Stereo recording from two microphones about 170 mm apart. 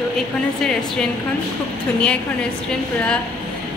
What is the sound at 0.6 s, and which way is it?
Speech, 5° left (ahead or behind).